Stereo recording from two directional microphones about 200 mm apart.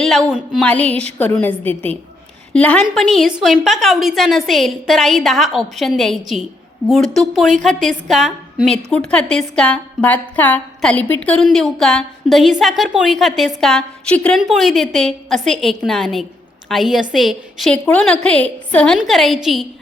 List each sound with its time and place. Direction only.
0.0 s a woman's voice: centre (ahead or behind)
7.7 s a woman's voice: 40° right (ahead or behind)
8.0 s a woman's voice: centre (ahead or behind)